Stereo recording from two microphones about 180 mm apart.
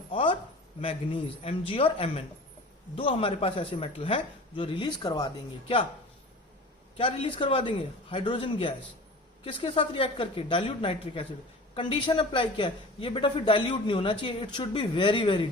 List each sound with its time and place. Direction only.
0.1 s a sound: 30° left (ahead or behind)
0.8 s a man's voice: 30° left (ahead or behind)
6.9 s a man's voice: 30° left (ahead or behind)